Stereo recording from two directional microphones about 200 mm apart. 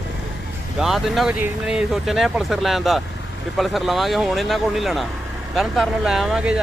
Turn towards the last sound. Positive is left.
turn(degrees=-5)  # may be behind; listen again after turning